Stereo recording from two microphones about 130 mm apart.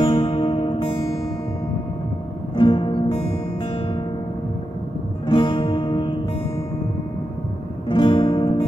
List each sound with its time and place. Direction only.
0.0 s music: 40° left (ahead or behind)
2.5 s music: 35° left (ahead or behind)
3.1 s music: 55° left (ahead or behind)
5.2 s music: 40° left (ahead or behind)
7.9 s music: 35° left (ahead or behind)